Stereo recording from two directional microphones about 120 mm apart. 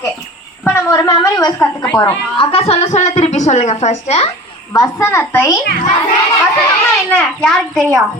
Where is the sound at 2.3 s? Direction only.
55° left (ahead or behind).